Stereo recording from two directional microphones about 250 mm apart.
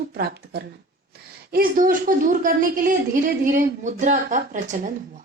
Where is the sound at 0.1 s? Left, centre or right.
Right.